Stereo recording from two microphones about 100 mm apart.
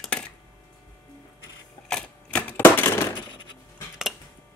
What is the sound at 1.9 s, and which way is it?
Typewriter, 10° left (ahead or behind).